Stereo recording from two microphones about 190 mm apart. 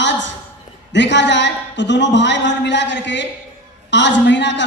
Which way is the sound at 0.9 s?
70° left (ahead or behind).